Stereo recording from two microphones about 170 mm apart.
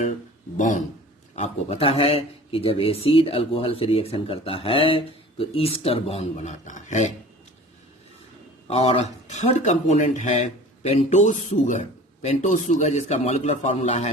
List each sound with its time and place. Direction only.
0.5 s speech: 45° left (ahead or behind)
1.4 s a man's voice: 35° left (ahead or behind)
8.6 s a man's voice: 35° left (ahead or behind)